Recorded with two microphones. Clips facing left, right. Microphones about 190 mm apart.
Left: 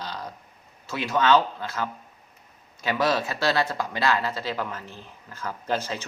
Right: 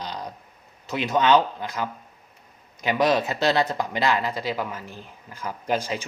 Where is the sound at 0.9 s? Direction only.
20° right (ahead or behind).